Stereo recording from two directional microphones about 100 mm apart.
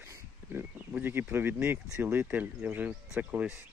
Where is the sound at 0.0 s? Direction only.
20° right (ahead or behind).